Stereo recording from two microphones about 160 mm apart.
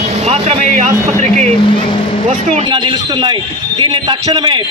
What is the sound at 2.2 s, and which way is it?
Speech, 45° right (ahead or behind).